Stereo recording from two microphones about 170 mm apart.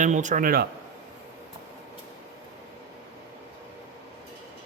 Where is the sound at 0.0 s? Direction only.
45° right (ahead or behind).